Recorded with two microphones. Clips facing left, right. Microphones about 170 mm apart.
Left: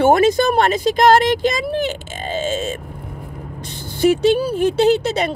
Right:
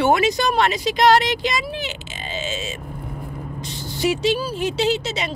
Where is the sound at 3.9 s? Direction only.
55° left (ahead or behind).